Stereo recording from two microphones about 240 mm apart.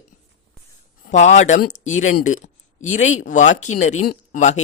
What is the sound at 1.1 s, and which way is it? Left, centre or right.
Speech, left.